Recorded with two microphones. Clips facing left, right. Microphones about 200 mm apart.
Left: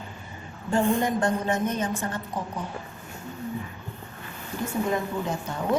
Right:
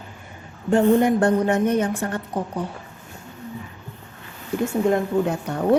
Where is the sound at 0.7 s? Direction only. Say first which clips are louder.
Right 7 dB; 60° right (ahead or behind).